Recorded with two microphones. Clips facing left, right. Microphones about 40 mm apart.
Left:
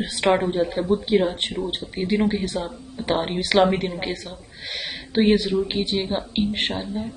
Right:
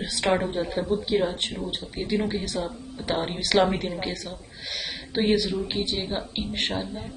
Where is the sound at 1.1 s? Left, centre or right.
Left.